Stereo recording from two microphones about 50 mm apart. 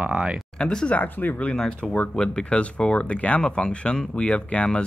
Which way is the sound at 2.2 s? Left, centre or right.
Centre.